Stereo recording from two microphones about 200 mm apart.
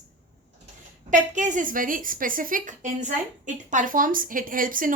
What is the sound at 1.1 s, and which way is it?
A woman's voice, 40° right (ahead or behind).